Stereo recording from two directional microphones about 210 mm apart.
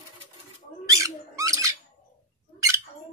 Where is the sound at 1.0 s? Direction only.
15° right (ahead or behind).